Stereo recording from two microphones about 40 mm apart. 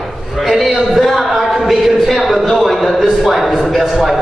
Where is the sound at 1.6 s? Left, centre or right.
Centre.